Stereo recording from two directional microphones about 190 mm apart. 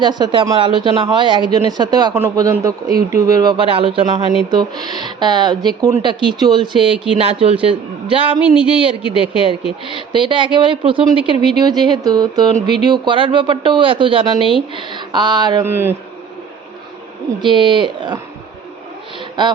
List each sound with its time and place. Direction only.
0.0 s speech: 25° right (ahead or behind)
15.6 s a man's voice: 10° right (ahead or behind)
17.4 s speech: 25° right (ahead or behind)